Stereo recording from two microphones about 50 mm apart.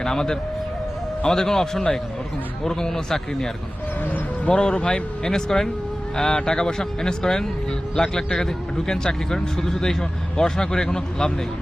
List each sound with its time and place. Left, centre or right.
0.0 s a man's voice: centre
4.0 s a man's voice: left; by 11.3 s centre